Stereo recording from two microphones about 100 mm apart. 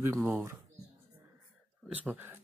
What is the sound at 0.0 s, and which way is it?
Speech, 20° right (ahead or behind).